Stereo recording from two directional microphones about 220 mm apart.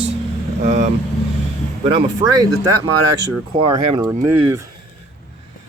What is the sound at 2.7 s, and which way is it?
Speech, 90° right.